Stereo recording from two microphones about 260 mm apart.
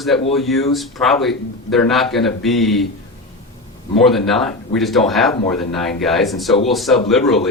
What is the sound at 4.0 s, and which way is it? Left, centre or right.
Speech, centre.